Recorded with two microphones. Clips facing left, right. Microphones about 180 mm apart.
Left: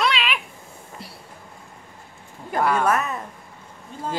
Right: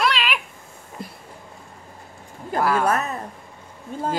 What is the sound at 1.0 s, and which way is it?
Train, 50° right (ahead or behind).